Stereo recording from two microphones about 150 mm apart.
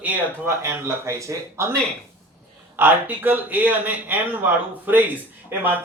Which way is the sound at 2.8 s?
10° right (ahead or behind).